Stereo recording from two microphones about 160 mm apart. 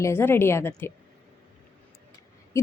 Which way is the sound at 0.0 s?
15° left (ahead or behind).